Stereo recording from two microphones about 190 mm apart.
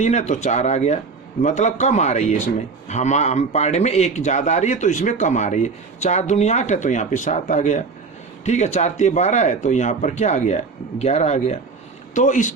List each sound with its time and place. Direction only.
0.0 s a man's voice: 35° left (ahead or behind)